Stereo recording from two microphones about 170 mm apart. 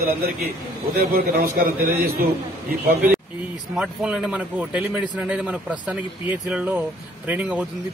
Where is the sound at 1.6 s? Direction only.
60° right (ahead or behind).